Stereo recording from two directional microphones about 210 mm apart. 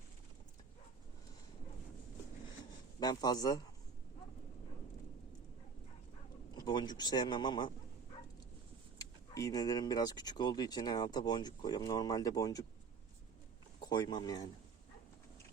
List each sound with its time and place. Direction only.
3.0 s a man's voice: 20° left (ahead or behind)
6.6 s speech: 20° left (ahead or behind)
9.0 s speech: 15° left (ahead or behind)
13.8 s speech: 20° left (ahead or behind)